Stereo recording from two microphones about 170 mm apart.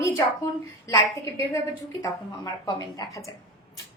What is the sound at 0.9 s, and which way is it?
Speech, 20° left (ahead or behind).